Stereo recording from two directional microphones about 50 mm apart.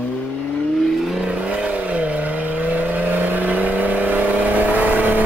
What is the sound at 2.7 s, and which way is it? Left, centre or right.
Vehicle, right.